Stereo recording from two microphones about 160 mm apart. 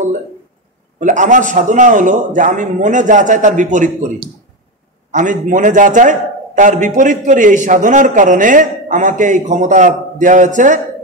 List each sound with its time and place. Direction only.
0.9 s a man's voice: 50° right (ahead or behind)
5.1 s a man's voice: 55° right (ahead or behind)